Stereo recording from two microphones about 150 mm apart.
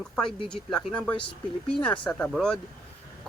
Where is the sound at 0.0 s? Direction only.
5° left (ahead or behind).